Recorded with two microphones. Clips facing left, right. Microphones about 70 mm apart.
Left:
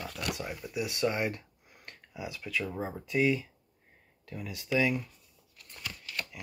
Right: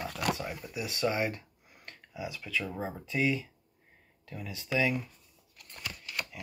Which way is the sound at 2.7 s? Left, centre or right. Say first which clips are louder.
Left 2 dB; centre.